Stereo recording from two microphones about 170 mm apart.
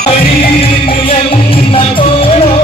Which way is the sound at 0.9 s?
35° left (ahead or behind).